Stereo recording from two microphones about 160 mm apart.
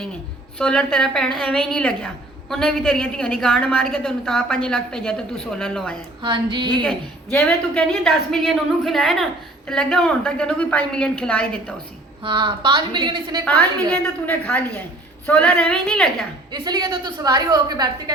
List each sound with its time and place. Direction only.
0.6 s a woman's voice: 5° left (ahead or behind)
6.2 s a woman's voice: 30° right (ahead or behind)
6.8 s a woman's voice: 5° left (ahead or behind)
12.2 s a woman's voice: 30° right (ahead or behind)
14.3 s a woman's voice: 10° left (ahead or behind)
16.5 s a woman's voice: 25° right (ahead or behind)